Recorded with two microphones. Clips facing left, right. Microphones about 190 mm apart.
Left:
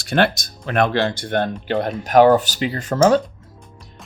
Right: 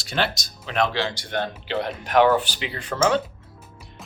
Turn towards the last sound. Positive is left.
turn(degrees=40)  # may be behind; listen again after turning